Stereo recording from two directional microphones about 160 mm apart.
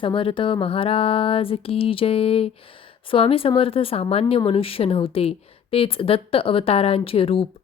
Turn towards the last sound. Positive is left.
turn(degrees=35)  # may be behind; listen again after turning